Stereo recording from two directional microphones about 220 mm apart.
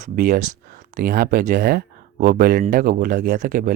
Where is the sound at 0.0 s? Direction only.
35° right (ahead or behind).